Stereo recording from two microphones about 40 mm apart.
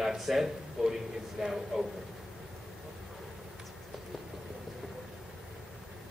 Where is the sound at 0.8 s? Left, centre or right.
Centre.